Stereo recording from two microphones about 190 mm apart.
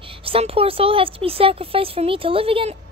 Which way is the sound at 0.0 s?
30° right (ahead or behind).